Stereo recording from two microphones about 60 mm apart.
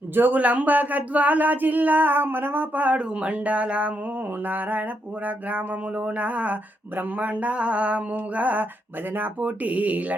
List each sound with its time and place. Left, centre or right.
0.1 s speech: right